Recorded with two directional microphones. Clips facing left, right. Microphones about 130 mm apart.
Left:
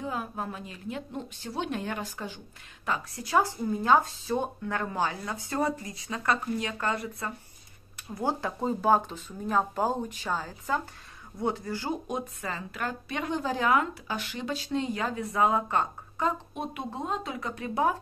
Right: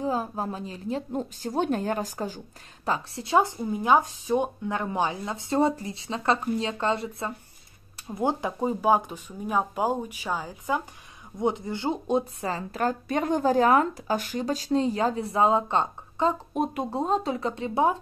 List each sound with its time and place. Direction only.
0.0 s a woman's voice: 30° right (ahead or behind)
16.5 s a woman's voice: 40° right (ahead or behind); by 17.9 s 25° right (ahead or behind)